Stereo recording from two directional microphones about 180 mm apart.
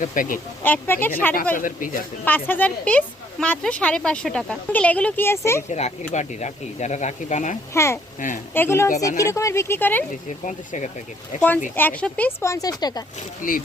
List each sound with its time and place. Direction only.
0.0 s speech: 50° left (ahead or behind)
0.6 s speech: 10° left (ahead or behind)
1.5 s speech: 50° left (ahead or behind)
2.2 s speech: 10° left (ahead or behind)
5.7 s speech: 40° left (ahead or behind)
7.7 s speech: 15° left (ahead or behind)
8.2 s speech: 45° left (ahead or behind)
8.5 s speech: 15° left (ahead or behind)
10.4 s speech: 45° left (ahead or behind)
11.3 s speech: 10° left (ahead or behind)
13.1 s speech: 50° left (ahead or behind)